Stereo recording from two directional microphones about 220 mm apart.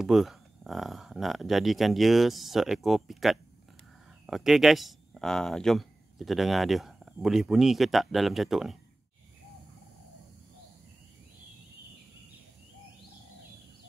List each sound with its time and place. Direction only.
0.0 s speech: centre (ahead or behind)